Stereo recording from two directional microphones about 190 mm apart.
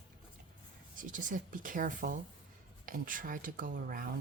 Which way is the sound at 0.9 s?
45° right (ahead or behind).